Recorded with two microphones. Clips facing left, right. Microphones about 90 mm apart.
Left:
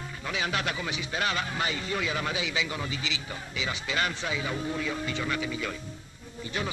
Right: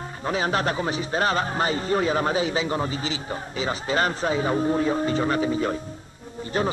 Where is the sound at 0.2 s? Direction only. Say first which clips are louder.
Right 7 dB; 40° right (ahead or behind).